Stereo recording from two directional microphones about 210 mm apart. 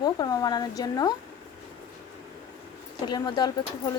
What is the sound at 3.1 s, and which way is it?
Speech, 20° left (ahead or behind).